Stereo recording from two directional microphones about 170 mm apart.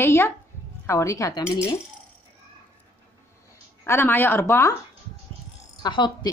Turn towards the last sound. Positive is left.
turn(degrees=25)  # may be behind; listen again after turning